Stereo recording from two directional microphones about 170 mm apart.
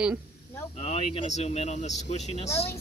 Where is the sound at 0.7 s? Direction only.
35° left (ahead or behind).